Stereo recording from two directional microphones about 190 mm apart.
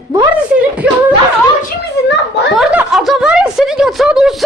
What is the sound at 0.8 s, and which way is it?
Speech, 5° right (ahead or behind).